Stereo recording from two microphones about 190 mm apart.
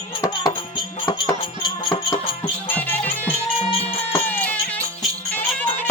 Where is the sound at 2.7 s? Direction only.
10° left (ahead or behind).